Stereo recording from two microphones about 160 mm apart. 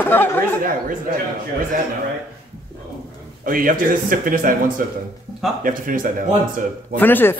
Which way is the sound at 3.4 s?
60° right (ahead or behind).